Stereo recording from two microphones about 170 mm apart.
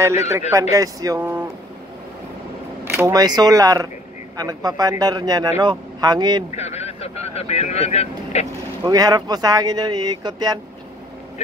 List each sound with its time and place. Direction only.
0.5 s a man's voice: 20° right (ahead or behind)
2.8 s a man's voice: 15° right (ahead or behind)
6.5 s speech: 40° left (ahead or behind)
8.8 s a man's voice: 20° right (ahead or behind)